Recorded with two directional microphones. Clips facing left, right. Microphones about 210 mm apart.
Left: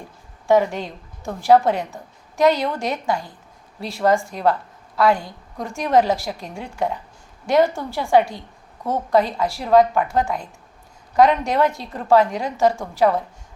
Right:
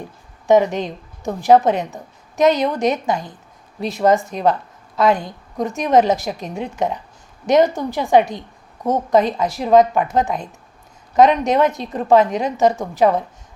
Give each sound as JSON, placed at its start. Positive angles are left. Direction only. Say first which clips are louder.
{"t": 0.4, "sound": "a woman's voice", "louder": "right 3 dB", "side_deg": -20}